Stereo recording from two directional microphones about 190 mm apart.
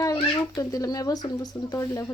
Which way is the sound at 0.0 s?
20° left (ahead or behind).